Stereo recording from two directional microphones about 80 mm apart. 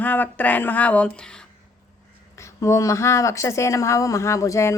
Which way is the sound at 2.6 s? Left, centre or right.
Left.